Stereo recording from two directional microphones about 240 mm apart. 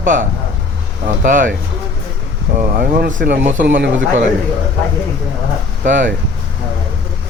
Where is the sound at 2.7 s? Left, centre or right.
Right.